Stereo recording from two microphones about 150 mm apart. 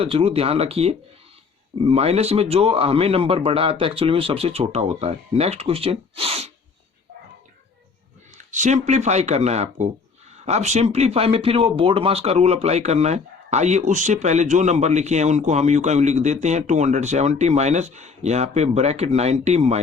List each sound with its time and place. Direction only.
0.0 s a man's voice: 40° right (ahead or behind)
8.4 s speech: 55° right (ahead or behind)